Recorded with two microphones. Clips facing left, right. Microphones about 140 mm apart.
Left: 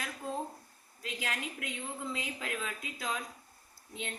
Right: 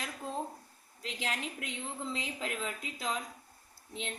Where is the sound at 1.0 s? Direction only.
25° right (ahead or behind).